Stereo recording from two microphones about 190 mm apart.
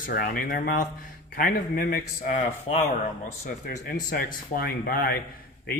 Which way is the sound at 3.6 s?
50° left (ahead or behind).